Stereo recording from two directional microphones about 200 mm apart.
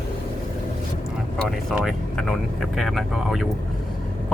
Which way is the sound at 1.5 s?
Centre (ahead or behind).